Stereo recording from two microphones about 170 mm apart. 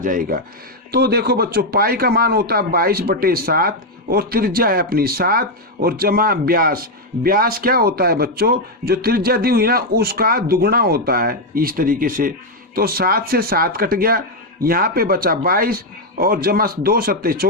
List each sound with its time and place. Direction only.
0.0 s speech: 50° right (ahead or behind)
0.9 s speech: 70° right (ahead or behind)